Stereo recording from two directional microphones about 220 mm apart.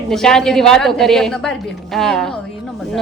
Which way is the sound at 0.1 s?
Centre (ahead or behind).